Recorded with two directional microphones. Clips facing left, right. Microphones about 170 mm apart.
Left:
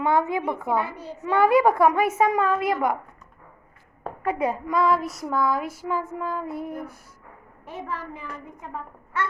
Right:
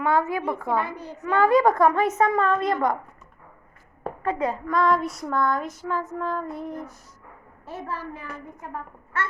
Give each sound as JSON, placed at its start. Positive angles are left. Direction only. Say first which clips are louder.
{"t": 0.0, "sound": "child singing", "louder": "left 1 dB", "side_deg": 20}
{"t": 4.2, "sound": "child singing", "louder": "left 1 dB", "side_deg": 10}